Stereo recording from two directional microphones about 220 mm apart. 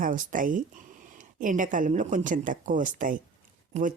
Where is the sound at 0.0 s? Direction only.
40° right (ahead or behind).